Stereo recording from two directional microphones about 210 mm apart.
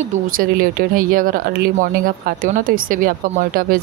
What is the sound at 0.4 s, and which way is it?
Speech, 40° right (ahead or behind).